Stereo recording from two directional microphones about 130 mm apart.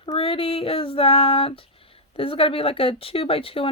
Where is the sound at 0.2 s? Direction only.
45° left (ahead or behind).